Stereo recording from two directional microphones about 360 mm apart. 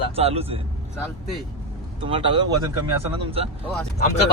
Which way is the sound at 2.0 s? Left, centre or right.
Centre.